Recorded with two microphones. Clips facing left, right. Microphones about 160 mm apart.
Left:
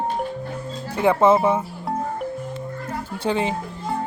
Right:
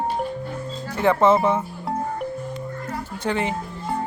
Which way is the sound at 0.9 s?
10° left (ahead or behind).